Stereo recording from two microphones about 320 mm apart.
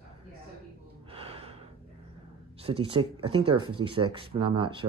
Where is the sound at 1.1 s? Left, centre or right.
Centre.